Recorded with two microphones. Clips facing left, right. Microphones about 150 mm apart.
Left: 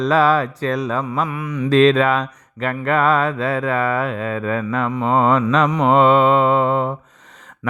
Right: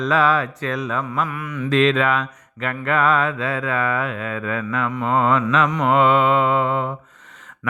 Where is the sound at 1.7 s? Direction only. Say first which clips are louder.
Left 4 dB; 35° left (ahead or behind).